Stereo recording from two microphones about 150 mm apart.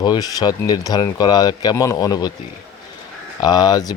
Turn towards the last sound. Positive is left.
turn(degrees=25)  # may be behind; listen again after turning